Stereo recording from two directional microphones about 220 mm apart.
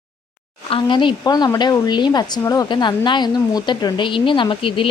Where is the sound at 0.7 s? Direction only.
20° left (ahead or behind).